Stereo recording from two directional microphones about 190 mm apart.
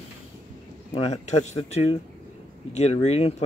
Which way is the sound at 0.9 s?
35° left (ahead or behind).